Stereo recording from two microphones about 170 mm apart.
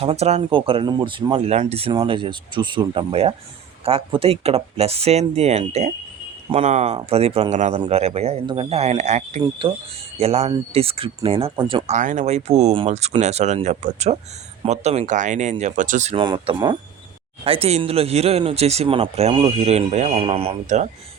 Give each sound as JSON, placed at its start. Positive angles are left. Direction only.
{"t": 0.0, "sound": "speech", "side_deg": -35}
{"t": 9.4, "sound": "speech", "side_deg": -30}
{"t": 11.5, "sound": "speech", "side_deg": -25}
{"t": 11.9, "sound": "speech", "side_deg": -45}
{"t": 16.1, "sound": "speech", "side_deg": -30}